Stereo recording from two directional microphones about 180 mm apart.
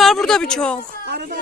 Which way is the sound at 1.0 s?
65° right (ahead or behind).